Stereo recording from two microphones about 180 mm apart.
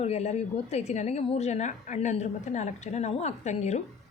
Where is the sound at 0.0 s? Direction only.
35° left (ahead or behind).